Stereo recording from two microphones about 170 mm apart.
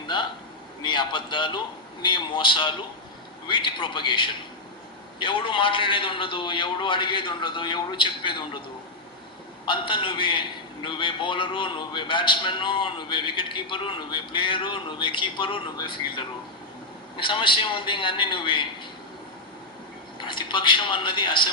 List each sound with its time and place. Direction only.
0.8 s speech: 25° left (ahead or behind)
9.6 s speech: 30° left (ahead or behind)
20.1 s speech: 30° left (ahead or behind)